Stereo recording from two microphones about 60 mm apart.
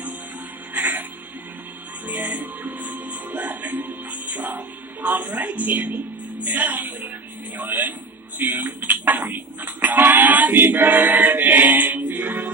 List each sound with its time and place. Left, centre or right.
0.7 s music: right
2.0 s music: right
6.4 s a man's voice: right
8.4 s a sound: right